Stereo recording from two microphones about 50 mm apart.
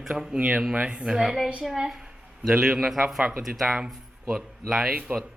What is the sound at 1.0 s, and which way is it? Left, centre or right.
A woman's voice, centre.